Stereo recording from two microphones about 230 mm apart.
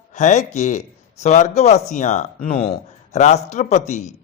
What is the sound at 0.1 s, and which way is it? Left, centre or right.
A man's voice, left.